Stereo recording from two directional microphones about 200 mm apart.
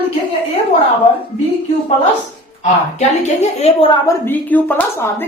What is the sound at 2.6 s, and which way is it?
A woman's voice, 35° left (ahead or behind).